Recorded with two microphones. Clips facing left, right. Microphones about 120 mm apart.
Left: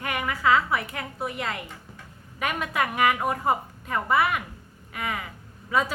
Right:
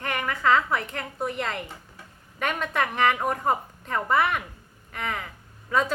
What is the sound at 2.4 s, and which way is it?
A woman's voice, 5° left (ahead or behind).